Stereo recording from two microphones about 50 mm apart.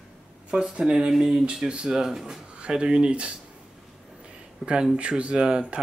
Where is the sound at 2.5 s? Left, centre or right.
Centre.